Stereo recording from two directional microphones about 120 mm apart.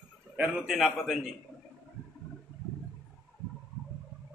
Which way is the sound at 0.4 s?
5° right (ahead or behind).